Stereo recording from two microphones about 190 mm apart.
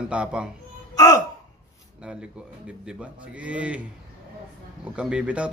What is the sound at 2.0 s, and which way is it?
Speech, 5° right (ahead or behind).